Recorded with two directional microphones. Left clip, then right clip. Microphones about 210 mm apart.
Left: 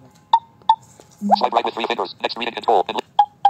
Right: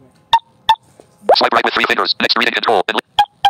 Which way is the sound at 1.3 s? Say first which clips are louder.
Right 6 dB; 60° right (ahead or behind).